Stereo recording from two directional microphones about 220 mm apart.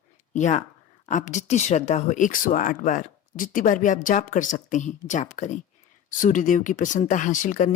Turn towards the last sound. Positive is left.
turn(degrees=35)  # may be behind; listen again after turning